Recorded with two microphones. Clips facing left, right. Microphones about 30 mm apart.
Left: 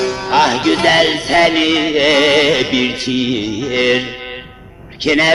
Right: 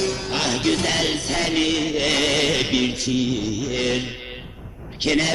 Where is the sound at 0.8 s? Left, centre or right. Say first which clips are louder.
Left 10 dB; left.